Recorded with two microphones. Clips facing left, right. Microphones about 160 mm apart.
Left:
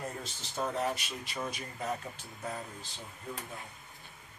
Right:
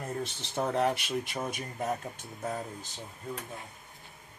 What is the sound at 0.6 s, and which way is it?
Speech, 65° right (ahead or behind).